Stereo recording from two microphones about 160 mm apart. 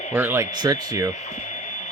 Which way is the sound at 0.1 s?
15° right (ahead or behind).